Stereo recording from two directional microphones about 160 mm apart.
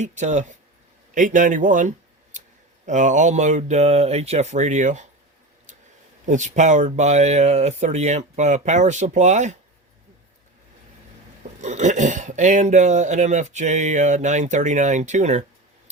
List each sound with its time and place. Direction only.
0.0 s speech: 45° right (ahead or behind)
2.3 s clicking: 50° right (ahead or behind)
2.8 s speech: 50° right (ahead or behind)
6.2 s speech: 50° right (ahead or behind)
11.6 s speech: 50° right (ahead or behind)